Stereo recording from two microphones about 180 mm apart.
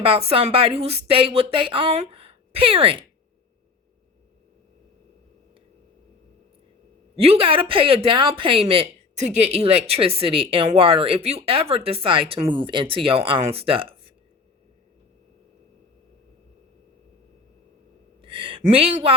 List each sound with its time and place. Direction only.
0.0 s speech: 30° right (ahead or behind)
7.2 s a woman's voice: 30° right (ahead or behind)
18.2 s a sound: 30° right (ahead or behind)